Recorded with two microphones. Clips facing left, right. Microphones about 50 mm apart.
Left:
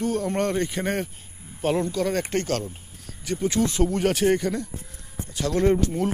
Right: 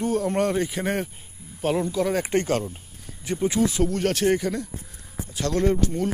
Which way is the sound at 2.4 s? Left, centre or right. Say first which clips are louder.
Right 2 dB; centre.